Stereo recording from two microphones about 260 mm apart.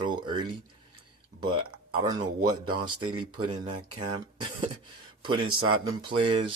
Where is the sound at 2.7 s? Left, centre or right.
Centre.